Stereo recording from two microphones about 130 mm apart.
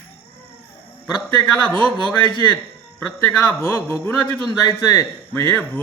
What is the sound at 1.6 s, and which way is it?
Speech, 10° left (ahead or behind).